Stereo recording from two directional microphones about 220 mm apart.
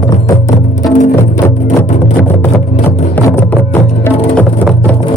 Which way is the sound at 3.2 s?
10° left (ahead or behind).